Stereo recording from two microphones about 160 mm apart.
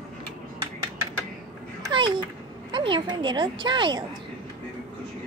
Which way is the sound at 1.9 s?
30° right (ahead or behind).